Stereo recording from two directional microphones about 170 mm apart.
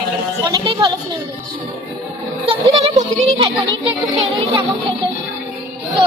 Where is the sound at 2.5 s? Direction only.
40° right (ahead or behind).